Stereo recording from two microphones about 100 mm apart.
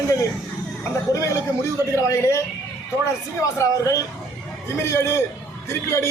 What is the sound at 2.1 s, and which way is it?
Speech, 30° left (ahead or behind).